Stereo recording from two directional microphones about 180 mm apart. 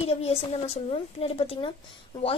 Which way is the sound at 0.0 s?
35° left (ahead or behind).